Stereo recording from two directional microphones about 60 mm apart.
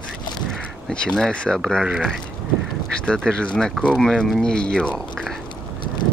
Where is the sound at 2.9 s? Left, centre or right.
Centre.